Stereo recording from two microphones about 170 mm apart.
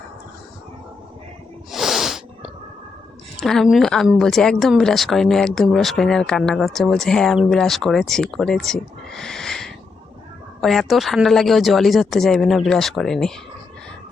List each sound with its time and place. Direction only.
1.7 s snort: centre (ahead or behind)
3.3 s a woman's voice: centre (ahead or behind)